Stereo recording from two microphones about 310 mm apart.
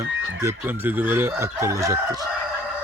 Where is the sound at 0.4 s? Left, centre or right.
Centre.